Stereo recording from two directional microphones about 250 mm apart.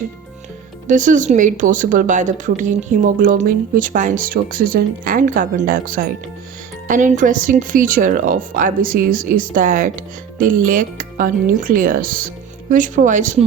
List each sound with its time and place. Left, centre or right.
0.9 s speech: right